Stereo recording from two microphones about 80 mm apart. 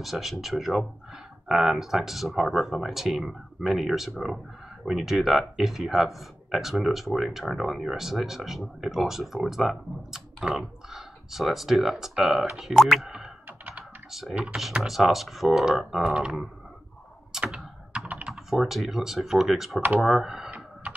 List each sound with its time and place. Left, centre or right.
0.0 s speech: centre
13.5 s computer keyboard: centre
14.4 s speech: centre
17.3 s tick-tock: centre
18.0 s typing: centre
18.3 s speech: centre